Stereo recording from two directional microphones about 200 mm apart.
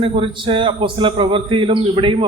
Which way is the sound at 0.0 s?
25° right (ahead or behind).